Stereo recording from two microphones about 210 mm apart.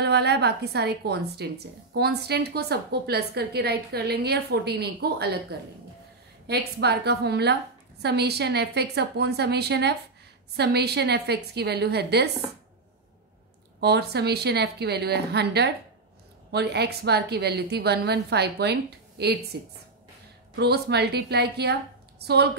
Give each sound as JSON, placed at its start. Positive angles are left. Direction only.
{"t": 0.0, "sound": "a woman's voice", "side_deg": -50}
{"t": 13.7, "sound": "a woman's voice", "side_deg": -50}